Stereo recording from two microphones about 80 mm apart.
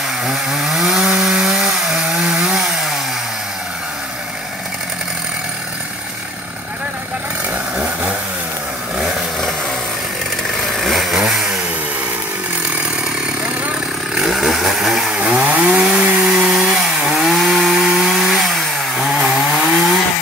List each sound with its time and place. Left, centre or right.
0.2 s chainsaw: centre
7.7 s chainsaw: centre
10.8 s chainsaw: centre
14.1 s chainsaw: centre